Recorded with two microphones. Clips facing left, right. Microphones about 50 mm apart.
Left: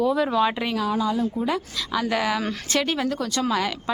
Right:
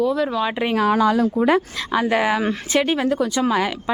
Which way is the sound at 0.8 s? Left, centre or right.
Right.